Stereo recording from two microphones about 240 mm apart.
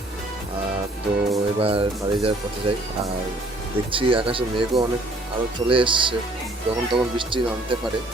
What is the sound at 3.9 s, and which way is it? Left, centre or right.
Speech, right.